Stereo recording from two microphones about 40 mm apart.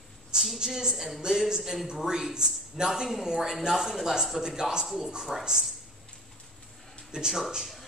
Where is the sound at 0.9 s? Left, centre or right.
Centre.